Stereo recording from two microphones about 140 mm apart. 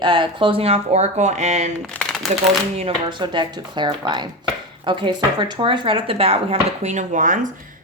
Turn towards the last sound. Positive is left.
turn(degrees=-65)  # may be behind; listen again after turning